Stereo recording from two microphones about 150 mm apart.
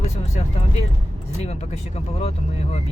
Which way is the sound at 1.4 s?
45° left (ahead or behind).